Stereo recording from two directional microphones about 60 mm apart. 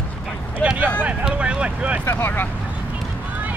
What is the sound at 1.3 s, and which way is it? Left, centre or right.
Speech, centre.